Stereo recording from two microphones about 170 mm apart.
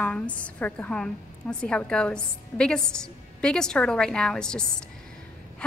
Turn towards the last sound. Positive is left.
turn(degrees=5)  # may be behind; listen again after turning